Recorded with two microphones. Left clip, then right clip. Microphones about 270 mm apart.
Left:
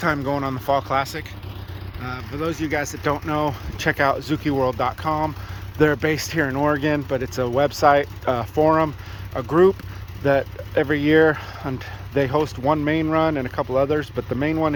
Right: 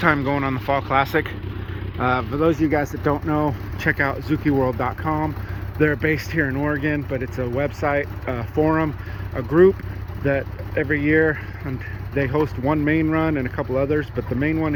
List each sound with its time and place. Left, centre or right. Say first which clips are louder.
0.0 s speech: right 3 dB; centre
2.9 s speech: right 1 dB; centre